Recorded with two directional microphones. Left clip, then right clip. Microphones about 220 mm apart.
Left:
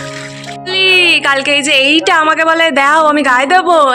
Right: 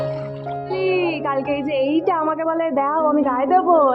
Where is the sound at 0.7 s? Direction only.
5° left (ahead or behind).